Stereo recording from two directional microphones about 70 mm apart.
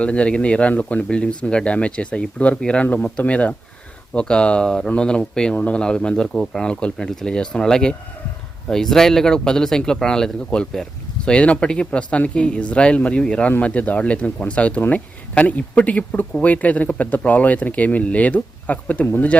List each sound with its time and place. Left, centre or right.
0.0 s speech: centre